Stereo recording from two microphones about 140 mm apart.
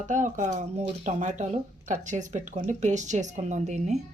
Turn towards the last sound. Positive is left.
turn(degrees=-55)  # may be behind; listen again after turning